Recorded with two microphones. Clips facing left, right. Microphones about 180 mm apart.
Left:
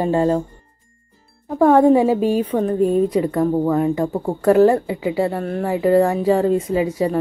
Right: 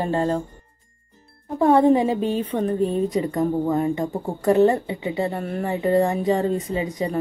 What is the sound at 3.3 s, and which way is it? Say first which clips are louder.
Speech: left 4 dB; 75° left (ahead or behind).